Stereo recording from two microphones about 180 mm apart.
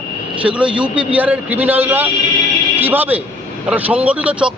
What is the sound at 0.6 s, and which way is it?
Speech, 25° right (ahead or behind).